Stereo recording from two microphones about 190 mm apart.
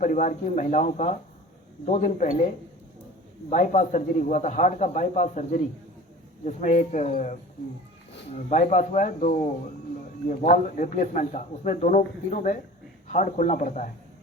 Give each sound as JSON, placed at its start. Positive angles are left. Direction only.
{"t": 0.0, "sound": "speech", "side_deg": 40}
{"t": 3.5, "sound": "speech", "side_deg": 40}
{"t": 8.4, "sound": "speech", "side_deg": 40}